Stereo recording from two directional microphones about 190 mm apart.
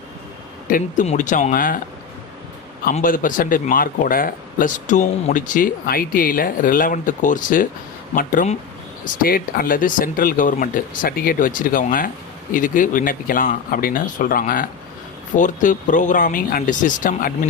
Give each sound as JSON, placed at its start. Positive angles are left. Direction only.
{"t": 0.7, "sound": "speech", "side_deg": 40}
{"t": 2.9, "sound": "speech", "side_deg": 45}